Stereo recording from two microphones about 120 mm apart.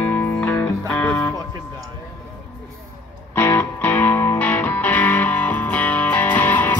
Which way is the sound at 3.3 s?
20° left (ahead or behind).